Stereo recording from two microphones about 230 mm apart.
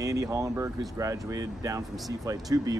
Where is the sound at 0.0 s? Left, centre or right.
Centre.